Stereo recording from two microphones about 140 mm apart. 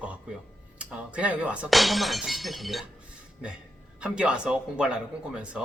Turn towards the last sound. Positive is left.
turn(degrees=-5)  # may be behind; listen again after turning